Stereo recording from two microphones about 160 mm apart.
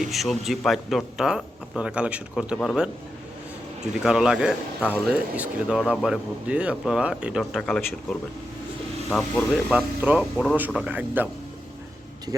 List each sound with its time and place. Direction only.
0.0 s speech: centre (ahead or behind)
4.0 s speech: 5° right (ahead or behind)
9.1 s speech: 5° left (ahead or behind)
9.7 s speech: 10° right (ahead or behind)
10.3 s speech: 5° left (ahead or behind)
10.8 s speech: 10° right (ahead or behind)
12.3 s speech: 20° right (ahead or behind)